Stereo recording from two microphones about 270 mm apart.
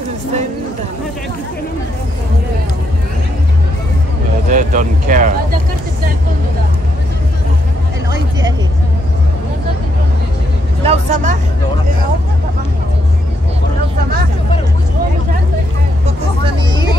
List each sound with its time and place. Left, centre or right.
4.5 s speech: right
10.8 s speech: right